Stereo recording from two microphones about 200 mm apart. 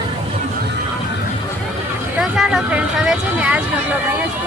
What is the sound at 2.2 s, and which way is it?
A woman's voice, centre (ahead or behind).